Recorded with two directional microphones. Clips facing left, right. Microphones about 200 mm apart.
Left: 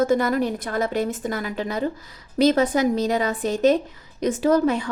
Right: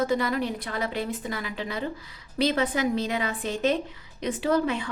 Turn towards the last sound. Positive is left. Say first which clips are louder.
# left 6 dB
turn(degrees=40)  # may be behind; listen again after turning